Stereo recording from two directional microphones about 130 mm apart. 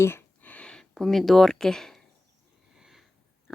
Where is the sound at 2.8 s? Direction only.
Centre (ahead or behind).